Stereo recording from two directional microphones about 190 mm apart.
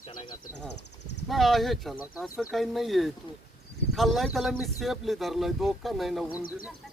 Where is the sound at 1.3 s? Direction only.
Centre (ahead or behind).